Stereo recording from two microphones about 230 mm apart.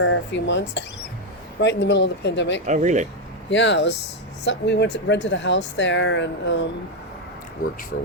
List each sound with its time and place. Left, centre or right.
0.0 s speech: left
2.6 s speech: right
3.5 s speech: left
7.6 s speech: left